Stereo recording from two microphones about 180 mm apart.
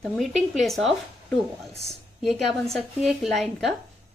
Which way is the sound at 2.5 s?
Centre (ahead or behind).